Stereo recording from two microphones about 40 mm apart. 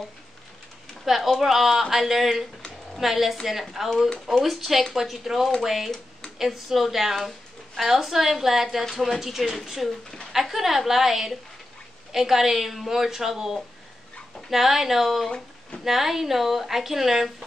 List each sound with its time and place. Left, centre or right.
1.0 s a woman's voice: centre
15.2 s a sound: centre
15.8 s a woman's voice: centre